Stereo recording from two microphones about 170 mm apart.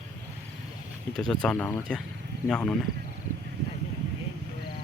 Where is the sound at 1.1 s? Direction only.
5° left (ahead or behind).